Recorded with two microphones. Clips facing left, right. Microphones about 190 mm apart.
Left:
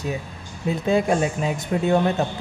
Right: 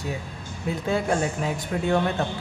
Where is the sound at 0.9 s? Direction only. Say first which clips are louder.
Left 4 dB; 15° left (ahead or behind).